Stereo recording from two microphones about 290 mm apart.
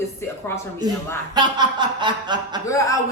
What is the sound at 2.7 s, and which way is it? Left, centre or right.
Speech, centre.